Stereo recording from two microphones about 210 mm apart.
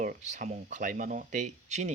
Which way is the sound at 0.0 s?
35° right (ahead or behind).